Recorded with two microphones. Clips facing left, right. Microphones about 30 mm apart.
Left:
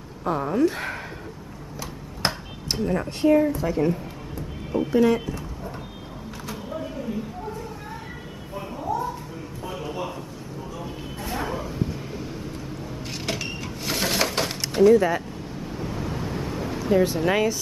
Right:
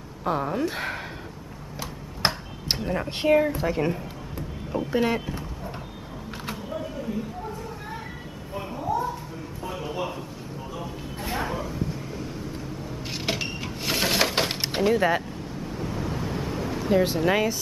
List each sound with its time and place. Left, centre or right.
0.2 s speech: centre
2.2 s tick-tock: centre
2.8 s speech: centre
3.1 s a woman's voice: right
3.6 s speech: right
6.5 s a sound: centre
8.7 s a sound: centre
11.5 s vehicle: centre
13.1 s creak: centre
13.6 s sewing machine: centre
14.3 s a sound: right
15.5 s a sound: centre
17.2 s speech: centre